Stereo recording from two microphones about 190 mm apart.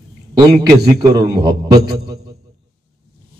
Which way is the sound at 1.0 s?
20° right (ahead or behind).